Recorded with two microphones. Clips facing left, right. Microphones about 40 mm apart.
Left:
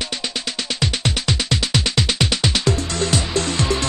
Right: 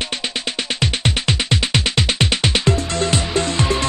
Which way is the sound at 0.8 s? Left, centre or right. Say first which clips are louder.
Right 1 dB; right.